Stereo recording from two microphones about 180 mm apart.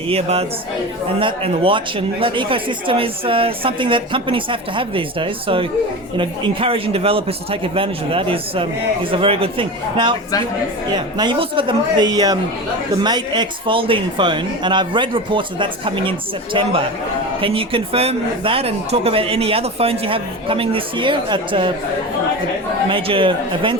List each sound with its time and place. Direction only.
0.1 s speech: 35° right (ahead or behind)
22.9 s speech: 30° right (ahead or behind)